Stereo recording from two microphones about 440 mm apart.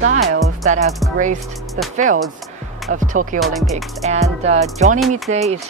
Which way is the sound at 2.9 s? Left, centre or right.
Centre.